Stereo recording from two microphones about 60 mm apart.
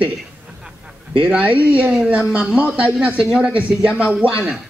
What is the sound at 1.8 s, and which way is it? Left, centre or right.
A man's voice, centre.